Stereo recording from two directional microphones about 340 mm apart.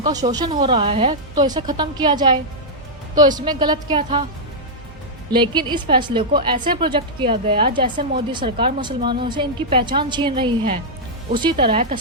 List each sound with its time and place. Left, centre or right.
0.0 s a woman's voice: centre
5.3 s a woman's voice: centre